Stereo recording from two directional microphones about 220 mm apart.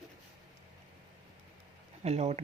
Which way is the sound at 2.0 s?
30° right (ahead or behind).